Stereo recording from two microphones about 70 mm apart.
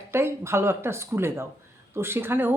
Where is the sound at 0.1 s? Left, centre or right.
Right.